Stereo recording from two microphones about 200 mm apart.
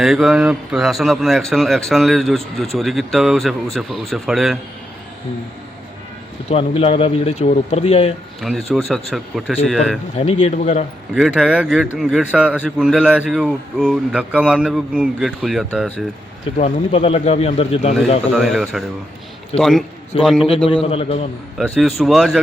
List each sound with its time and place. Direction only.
0.0 s a man's voice: centre (ahead or behind)
6.5 s a man's voice: 30° left (ahead or behind)
8.4 s a man's voice: centre (ahead or behind)
10.2 s a man's voice: 35° left (ahead or behind)
11.1 s a man's voice: 5° right (ahead or behind)
16.6 s a man's voice: 30° left (ahead or behind)
18.3 s a man's voice: centre (ahead or behind)
20.7 s a man's voice: 30° left (ahead or behind)
21.6 s a man's voice: centre (ahead or behind)